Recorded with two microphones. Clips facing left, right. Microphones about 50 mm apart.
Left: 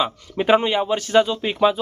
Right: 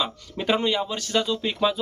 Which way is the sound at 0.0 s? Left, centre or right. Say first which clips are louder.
Left 6 dB; left.